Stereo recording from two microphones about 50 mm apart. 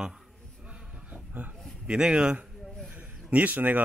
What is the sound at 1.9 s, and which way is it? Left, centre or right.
Speech, centre.